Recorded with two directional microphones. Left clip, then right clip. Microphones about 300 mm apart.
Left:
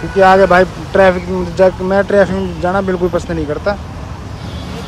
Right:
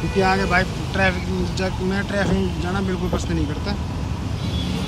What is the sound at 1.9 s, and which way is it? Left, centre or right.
Speech, centre.